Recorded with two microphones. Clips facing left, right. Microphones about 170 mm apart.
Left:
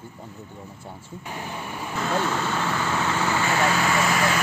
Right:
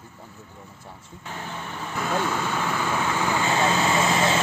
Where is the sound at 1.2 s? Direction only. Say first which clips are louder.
Left 1 dB; 15° left (ahead or behind).